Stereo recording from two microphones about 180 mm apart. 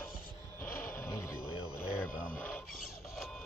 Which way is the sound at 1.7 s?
15° left (ahead or behind).